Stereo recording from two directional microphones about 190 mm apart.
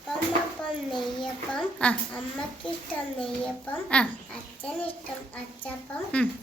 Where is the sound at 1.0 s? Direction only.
Centre (ahead or behind).